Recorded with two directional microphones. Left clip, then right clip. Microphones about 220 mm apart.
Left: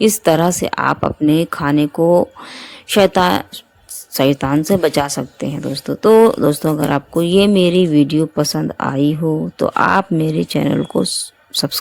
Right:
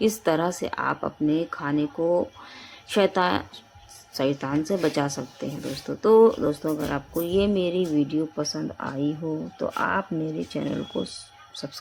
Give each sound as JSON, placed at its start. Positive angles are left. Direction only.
{"t": 0.0, "sound": "speech", "side_deg": 40}